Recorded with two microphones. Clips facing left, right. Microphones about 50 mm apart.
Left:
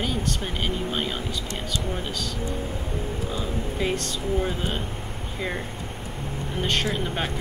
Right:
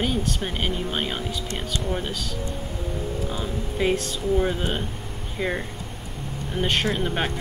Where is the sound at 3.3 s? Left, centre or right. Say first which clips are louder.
Even; centre.